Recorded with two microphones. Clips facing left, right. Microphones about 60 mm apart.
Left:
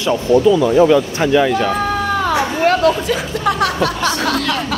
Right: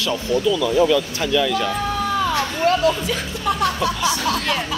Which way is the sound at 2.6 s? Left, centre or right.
Left.